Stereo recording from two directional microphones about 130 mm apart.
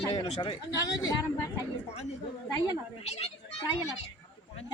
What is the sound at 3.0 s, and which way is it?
Speech, 55° left (ahead or behind).